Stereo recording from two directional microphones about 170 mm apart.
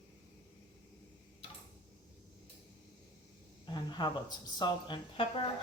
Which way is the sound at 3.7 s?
25° left (ahead or behind).